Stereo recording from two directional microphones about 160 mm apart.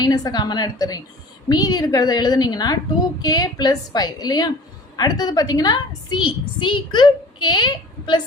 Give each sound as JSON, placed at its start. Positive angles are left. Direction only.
{"t": 0.0, "sound": "a woman's voice", "side_deg": 25}